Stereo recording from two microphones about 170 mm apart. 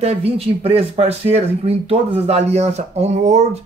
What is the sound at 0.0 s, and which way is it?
Speech, 35° right (ahead or behind).